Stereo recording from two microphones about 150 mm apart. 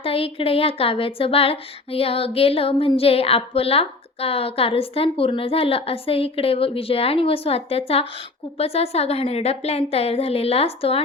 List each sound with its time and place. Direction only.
0.0 s a woman's voice: 40° left (ahead or behind)